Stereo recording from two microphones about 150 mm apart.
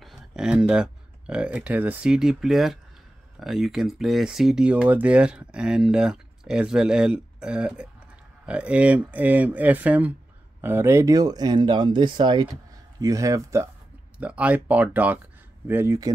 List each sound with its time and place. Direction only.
0.0 s speech: 5° right (ahead or behind); by 13.7 s 20° right (ahead or behind)
14.1 s speech: 10° right (ahead or behind)